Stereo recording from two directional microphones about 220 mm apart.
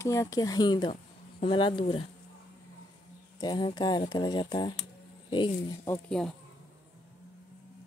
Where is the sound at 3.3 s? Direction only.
20° left (ahead or behind).